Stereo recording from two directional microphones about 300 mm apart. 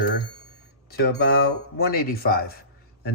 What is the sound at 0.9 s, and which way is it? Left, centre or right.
Speech, left.